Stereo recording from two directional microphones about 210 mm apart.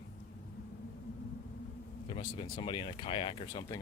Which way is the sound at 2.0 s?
25° left (ahead or behind).